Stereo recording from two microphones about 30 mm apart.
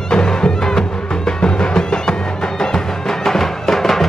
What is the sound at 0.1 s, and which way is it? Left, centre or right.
Music, left.